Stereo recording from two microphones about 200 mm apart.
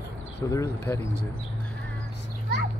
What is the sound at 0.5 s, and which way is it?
Speech, 15° left (ahead or behind).